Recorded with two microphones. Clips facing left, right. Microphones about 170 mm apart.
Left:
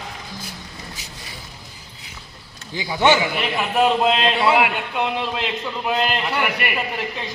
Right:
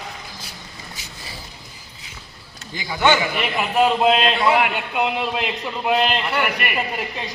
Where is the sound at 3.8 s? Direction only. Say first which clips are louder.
Right 1 dB; centre (ahead or behind).